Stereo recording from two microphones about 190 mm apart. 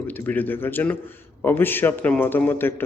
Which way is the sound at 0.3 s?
10° left (ahead or behind).